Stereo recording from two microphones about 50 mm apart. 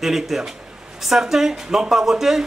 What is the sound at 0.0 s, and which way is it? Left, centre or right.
Speech, centre.